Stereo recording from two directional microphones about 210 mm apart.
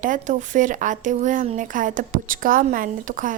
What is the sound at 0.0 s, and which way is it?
A woman's voice, 40° right (ahead or behind).